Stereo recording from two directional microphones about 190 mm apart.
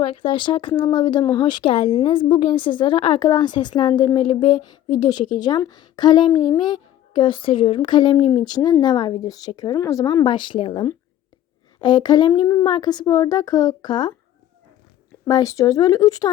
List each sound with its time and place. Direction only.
0.0 s speech: 25° left (ahead or behind)
15.3 s speech: 20° left (ahead or behind)